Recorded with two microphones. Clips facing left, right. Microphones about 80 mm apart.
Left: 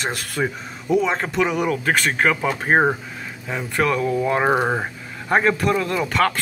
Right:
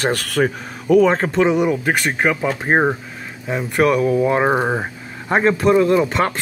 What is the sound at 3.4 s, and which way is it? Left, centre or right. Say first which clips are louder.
Speech: right 5 dB; centre.